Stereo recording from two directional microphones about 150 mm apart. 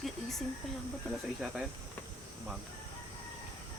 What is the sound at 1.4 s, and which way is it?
Speech, 5° right (ahead or behind).